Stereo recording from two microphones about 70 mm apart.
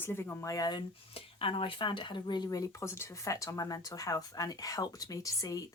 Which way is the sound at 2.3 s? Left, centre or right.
Left.